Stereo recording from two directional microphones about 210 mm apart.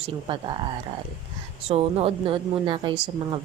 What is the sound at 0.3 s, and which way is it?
Speech, 25° right (ahead or behind).